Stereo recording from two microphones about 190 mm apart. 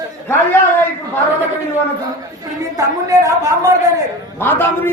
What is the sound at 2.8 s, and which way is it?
Speech, 15° right (ahead or behind).